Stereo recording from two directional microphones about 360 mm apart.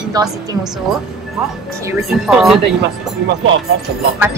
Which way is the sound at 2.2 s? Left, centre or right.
Centre.